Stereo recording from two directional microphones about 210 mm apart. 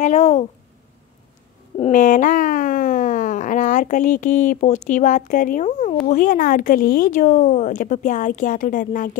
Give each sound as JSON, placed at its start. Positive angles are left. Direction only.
{"t": 0.0, "sound": "a woman's voice", "side_deg": 30}
{"t": 1.8, "sound": "a woman's voice", "side_deg": 40}